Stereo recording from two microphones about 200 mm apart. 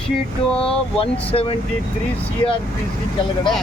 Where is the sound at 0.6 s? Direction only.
25° left (ahead or behind).